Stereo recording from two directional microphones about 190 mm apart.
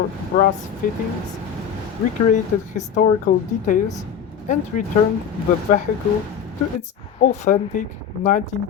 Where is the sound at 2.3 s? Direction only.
40° left (ahead or behind).